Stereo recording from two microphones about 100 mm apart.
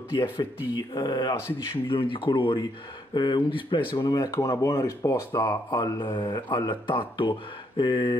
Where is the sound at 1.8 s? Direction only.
60° left (ahead or behind); by 5.6 s 30° left (ahead or behind).